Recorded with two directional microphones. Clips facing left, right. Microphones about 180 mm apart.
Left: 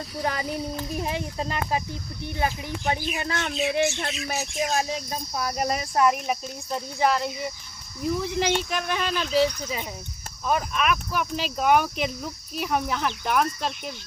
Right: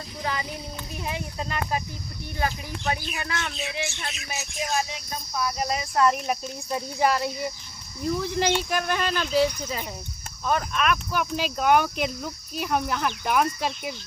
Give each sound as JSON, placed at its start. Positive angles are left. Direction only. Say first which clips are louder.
{"t": 0.3, "sound": "speech", "louder": "left 3 dB", "side_deg": 40}
{"t": 2.3, "sound": "speech", "louder": "left 1 dB", "side_deg": 20}
{"t": 3.2, "sound": "speech", "louder": "left 3 dB", "side_deg": 30}
{"t": 3.8, "sound": "speech", "louder": "left 8 dB", "side_deg": 55}
{"t": 4.4, "sound": "speech", "louder": "left 2 dB", "side_deg": 40}
{"t": 6.1, "sound": "speech", "louder": "even", "side_deg": 0}